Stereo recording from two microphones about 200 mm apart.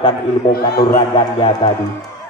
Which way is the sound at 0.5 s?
50° left (ahead or behind).